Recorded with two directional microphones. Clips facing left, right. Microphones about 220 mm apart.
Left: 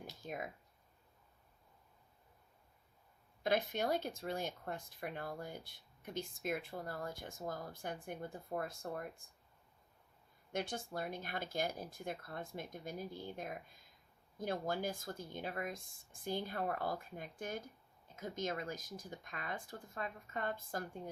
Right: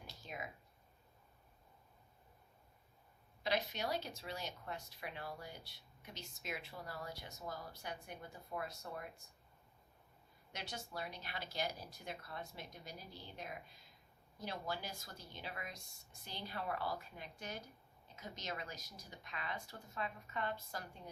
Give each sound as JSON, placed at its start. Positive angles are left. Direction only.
{"t": 0.2, "sound": "speech", "side_deg": 50}
{"t": 3.4, "sound": "speech", "side_deg": 50}
{"t": 10.5, "sound": "speech", "side_deg": 50}